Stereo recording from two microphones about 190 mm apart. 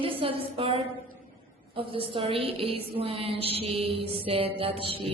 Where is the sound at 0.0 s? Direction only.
30° right (ahead or behind).